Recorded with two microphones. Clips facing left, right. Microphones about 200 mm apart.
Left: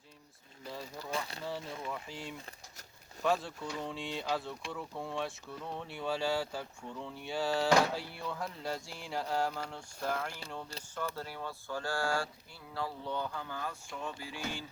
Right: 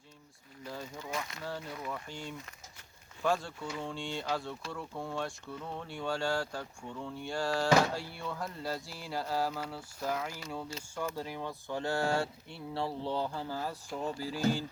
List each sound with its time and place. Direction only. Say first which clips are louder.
0.6 s a sound: right 1 dB; centre (ahead or behind)
1.1 s speech: left 1 dB; 30° left (ahead or behind)
1.8 s speech: right 1 dB; centre (ahead or behind); by 14.6 s 40° right (ahead or behind)